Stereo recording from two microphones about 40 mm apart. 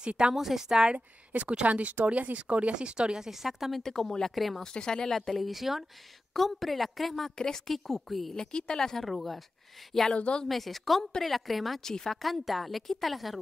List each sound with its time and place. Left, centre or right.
0.0 s a woman's voice: right
0.3 s a woman's voice: centre
0.9 s speech: right
3.3 s a woman's voice: centre
3.8 s speech: centre
4.7 s a woman's voice: centre
7.3 s a woman's voice: centre
8.4 s speech: left
9.0 s a woman's voice: centre
10.1 s speech: left
10.5 s a woman's voice: centre
11.8 s a woman's voice: centre